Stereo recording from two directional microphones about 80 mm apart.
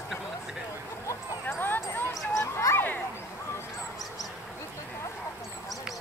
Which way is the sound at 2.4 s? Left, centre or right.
Left.